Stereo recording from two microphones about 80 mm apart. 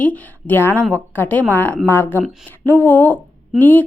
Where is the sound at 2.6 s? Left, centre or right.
Left.